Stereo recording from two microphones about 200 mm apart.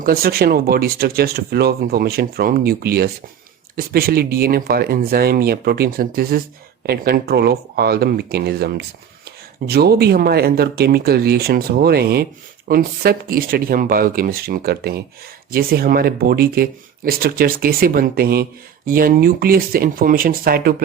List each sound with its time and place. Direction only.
0.0 s speech: 50° right (ahead or behind)